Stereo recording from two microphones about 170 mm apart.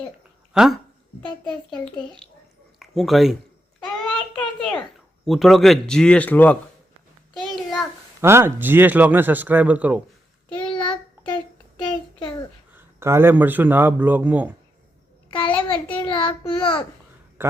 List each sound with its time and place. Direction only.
0.5 s speech: 5° right (ahead or behind)
5.2 s speech: centre (ahead or behind)
7.3 s a sound: centre (ahead or behind)
8.2 s speech: 15° right (ahead or behind)
10.6 s child singing: 30° left (ahead or behind)
12.7 s speech: 15° right (ahead or behind)
15.3 s a sound: 30° left (ahead or behind)
16.0 s child singing: 30° left (ahead or behind)